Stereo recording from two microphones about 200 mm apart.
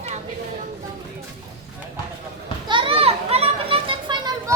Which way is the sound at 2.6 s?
25° right (ahead or behind).